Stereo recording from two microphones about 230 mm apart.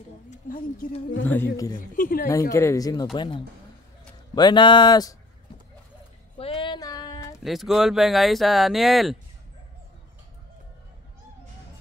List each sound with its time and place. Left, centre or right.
0.3 s speech: left
1.2 s speech: centre
1.8 s speech: left
2.5 s speech: centre
6.3 s a sound: left
7.4 s speech: centre